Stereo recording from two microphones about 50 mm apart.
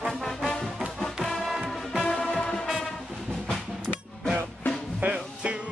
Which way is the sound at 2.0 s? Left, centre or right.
Centre.